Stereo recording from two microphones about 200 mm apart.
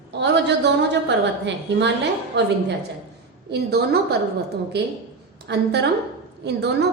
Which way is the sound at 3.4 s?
55° right (ahead or behind).